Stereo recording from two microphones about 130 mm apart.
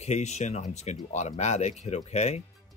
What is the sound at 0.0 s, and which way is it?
Speech, 60° left (ahead or behind).